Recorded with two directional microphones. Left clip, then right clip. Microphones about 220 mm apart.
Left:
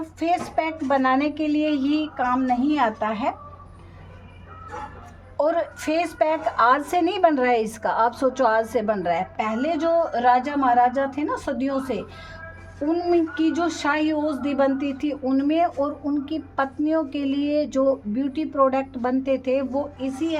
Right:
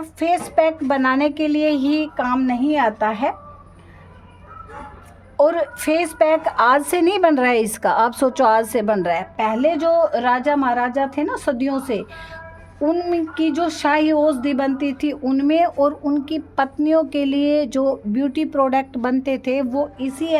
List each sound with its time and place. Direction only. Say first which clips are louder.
0.0 s a woman's voice: right 4 dB; 55° right (ahead or behind)
5.4 s a woman's voice: right 5 dB; 50° right (ahead or behind)